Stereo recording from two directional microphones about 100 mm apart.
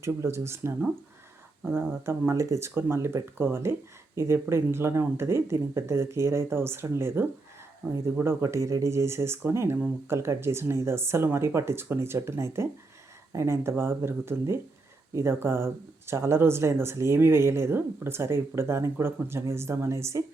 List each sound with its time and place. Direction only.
0.0 s speech: 30° right (ahead or behind)